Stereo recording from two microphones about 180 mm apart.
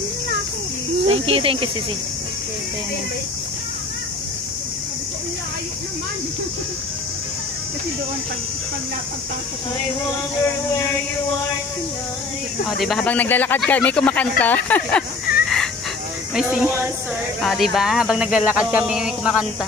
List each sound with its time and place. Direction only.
1.0 s speech: 35° right (ahead or behind)
12.6 s speech: centre (ahead or behind)
15.3 s chicken: 55° left (ahead or behind)
16.3 s speech: 5° right (ahead or behind)